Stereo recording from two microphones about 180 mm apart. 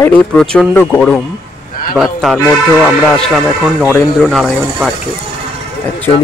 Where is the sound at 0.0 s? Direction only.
5° left (ahead or behind).